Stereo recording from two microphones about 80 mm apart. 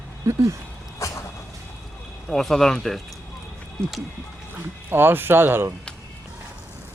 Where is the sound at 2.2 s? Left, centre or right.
Centre.